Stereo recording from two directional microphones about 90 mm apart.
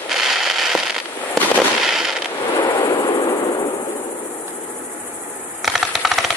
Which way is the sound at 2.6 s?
50° left (ahead or behind).